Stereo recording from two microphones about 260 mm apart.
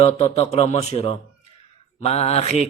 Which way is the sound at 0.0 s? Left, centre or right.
Left.